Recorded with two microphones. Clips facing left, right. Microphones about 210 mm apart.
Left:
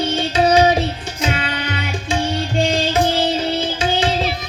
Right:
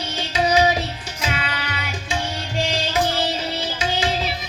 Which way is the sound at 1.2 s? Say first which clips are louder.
Left 5 dB; 30° left (ahead or behind).